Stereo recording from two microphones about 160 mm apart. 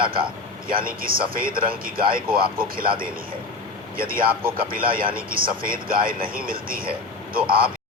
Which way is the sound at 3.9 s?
65° right (ahead or behind).